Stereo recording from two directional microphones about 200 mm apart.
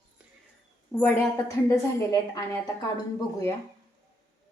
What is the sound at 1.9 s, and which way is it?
Speech, 15° left (ahead or behind).